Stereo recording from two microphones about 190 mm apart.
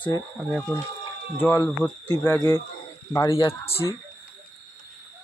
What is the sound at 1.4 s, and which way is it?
Speech, 10° left (ahead or behind).